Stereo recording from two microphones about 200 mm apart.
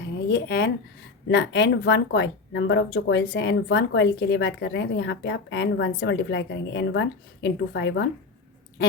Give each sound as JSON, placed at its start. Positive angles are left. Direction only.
{"t": 0.3, "sound": "speech", "side_deg": 55}